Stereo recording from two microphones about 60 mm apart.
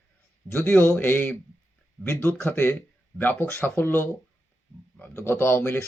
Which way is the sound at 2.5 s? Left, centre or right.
Left.